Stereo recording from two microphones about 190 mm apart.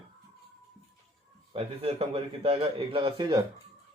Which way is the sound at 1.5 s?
30° right (ahead or behind).